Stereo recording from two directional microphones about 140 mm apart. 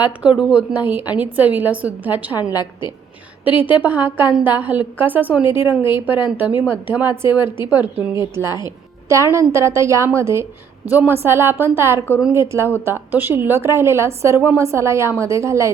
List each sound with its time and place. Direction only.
0.0 s a woman's voice: 10° right (ahead or behind)
2.4 s a woman's voice: 30° left (ahead or behind)
3.6 s a woman's voice: 10° right (ahead or behind)